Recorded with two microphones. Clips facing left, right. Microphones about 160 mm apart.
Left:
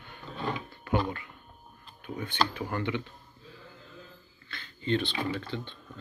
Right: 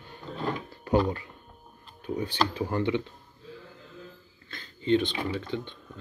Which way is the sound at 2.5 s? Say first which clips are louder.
Right 5 dB; 25° right (ahead or behind).